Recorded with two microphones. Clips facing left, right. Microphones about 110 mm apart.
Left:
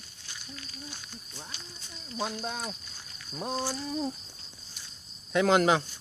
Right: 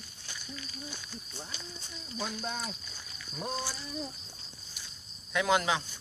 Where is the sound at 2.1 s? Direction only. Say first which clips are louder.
Left 3 dB; 15° left (ahead or behind).